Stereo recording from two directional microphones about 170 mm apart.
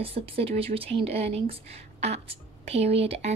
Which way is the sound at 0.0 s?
35° right (ahead or behind).